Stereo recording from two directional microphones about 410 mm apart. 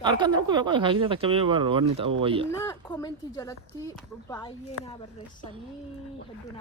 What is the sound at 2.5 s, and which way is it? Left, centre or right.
Speech, centre.